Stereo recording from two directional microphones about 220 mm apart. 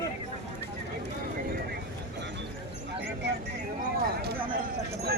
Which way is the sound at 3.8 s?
40° right (ahead or behind).